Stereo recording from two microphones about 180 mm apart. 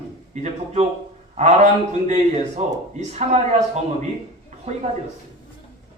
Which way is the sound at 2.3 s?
40° right (ahead or behind).